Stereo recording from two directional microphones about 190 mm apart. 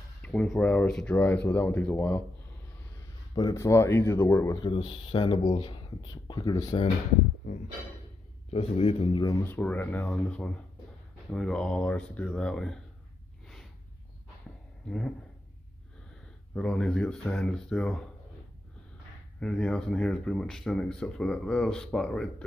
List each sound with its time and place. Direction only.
0.2 s speech: 5° left (ahead or behind)
3.3 s speech: 20° left (ahead or behind)
8.5 s speech: 30° left (ahead or behind); by 12.8 s 5° left (ahead or behind)
14.9 s speech: 5° left (ahead or behind)
16.5 s speech: 5° left (ahead or behind)
19.4 s speech: 5° left (ahead or behind)